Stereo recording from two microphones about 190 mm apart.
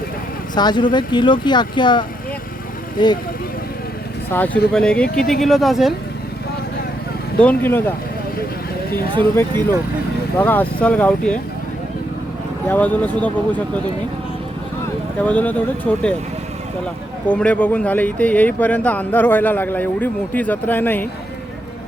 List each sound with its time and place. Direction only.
0.5 s speech: 20° left (ahead or behind)
4.3 s speech: 10° left (ahead or behind)
7.3 s speech: 10° left (ahead or behind)
10.3 s speech: 10° left (ahead or behind)
12.6 s speech: 10° left (ahead or behind)
15.2 s speech: 10° left (ahead or behind)
17.2 s speech: 5° left (ahead or behind)